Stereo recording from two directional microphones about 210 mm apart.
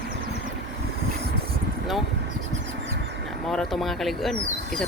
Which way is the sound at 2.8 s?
55° right (ahead or behind).